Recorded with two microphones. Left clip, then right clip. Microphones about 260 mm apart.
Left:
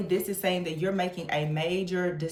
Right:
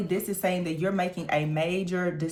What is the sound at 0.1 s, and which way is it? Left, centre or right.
Speech, right.